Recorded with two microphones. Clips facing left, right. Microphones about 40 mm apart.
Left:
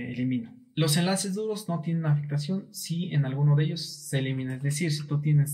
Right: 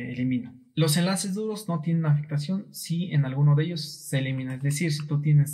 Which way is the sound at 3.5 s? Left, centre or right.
Centre.